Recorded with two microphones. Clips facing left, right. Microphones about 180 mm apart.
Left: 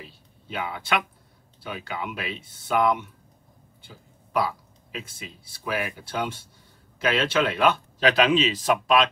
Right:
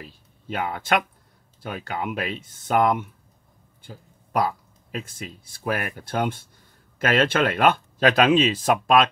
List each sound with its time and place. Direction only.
0.0 s speech: 45° right (ahead or behind)